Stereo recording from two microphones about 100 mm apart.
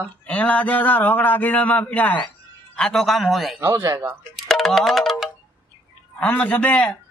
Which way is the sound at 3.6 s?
35° right (ahead or behind).